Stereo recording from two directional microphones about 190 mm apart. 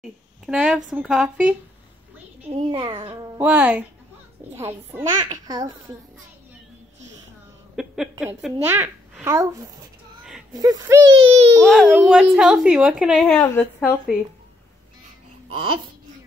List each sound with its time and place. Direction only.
0.5 s a woman's voice: 5° right (ahead or behind)
2.5 s a child's voice: 25° right (ahead or behind)
3.3 s a child's voice: 10° right (ahead or behind)
7.7 s speech: centre (ahead or behind)
8.6 s a child's voice: 15° right (ahead or behind)
11.1 s a child's voice: 30° right (ahead or behind)
11.6 s a woman's voice: centre (ahead or behind)
15.4 s babbling: 30° right (ahead or behind)